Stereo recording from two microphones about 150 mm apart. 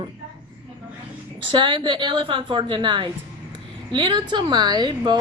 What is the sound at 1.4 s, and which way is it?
A woman's voice, 35° right (ahead or behind).